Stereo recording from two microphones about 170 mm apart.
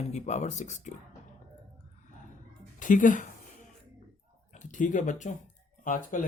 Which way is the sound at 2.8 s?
50° left (ahead or behind).